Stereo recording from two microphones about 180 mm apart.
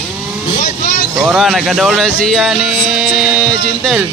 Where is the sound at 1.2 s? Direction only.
5° right (ahead or behind).